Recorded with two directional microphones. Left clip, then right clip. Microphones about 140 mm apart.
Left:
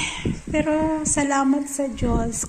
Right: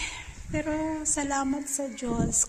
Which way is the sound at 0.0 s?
5° right (ahead or behind).